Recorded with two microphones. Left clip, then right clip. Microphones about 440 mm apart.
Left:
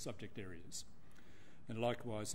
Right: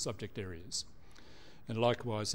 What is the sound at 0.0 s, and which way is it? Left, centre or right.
Speech, right.